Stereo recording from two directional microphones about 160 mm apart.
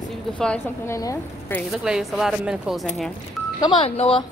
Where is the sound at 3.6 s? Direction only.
35° left (ahead or behind).